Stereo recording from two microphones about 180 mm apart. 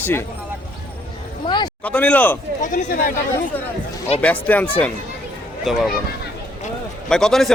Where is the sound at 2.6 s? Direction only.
45° left (ahead or behind).